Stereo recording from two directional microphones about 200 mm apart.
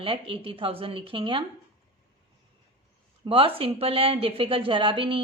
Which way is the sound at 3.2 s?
25° right (ahead or behind).